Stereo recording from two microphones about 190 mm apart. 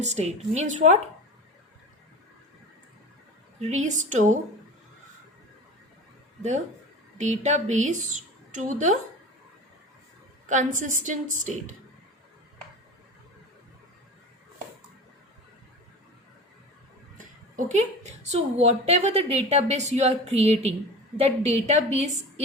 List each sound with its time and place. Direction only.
0.0 s a woman's voice: 35° right (ahead or behind)
3.6 s a woman's voice: 35° right (ahead or behind)
7.2 s a woman's voice: 40° right (ahead or behind)
10.5 s a woman's voice: 40° right (ahead or behind)
17.7 s a woman's voice: 35° right (ahead or behind)